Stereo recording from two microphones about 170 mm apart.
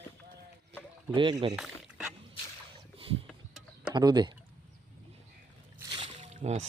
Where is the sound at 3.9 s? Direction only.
25° right (ahead or behind).